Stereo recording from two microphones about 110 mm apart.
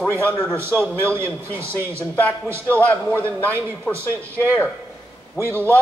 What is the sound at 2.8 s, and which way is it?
Speech, 15° left (ahead or behind).